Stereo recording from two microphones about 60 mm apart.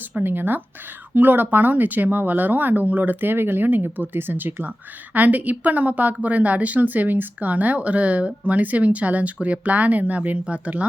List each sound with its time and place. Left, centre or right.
0.2 s a woman's voice: right